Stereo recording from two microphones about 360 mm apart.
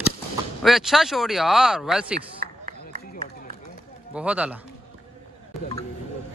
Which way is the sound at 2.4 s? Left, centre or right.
Right.